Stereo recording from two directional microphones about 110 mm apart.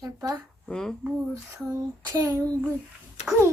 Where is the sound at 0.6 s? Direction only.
5° left (ahead or behind).